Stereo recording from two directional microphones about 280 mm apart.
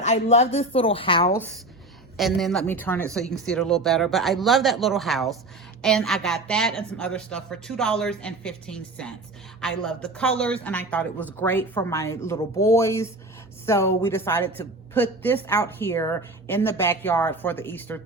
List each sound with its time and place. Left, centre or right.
0.0 s a woman's voice: left
2.1 s a woman's voice: centre